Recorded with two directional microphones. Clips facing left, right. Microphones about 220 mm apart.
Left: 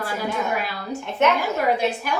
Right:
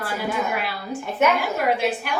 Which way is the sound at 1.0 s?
Centre (ahead or behind).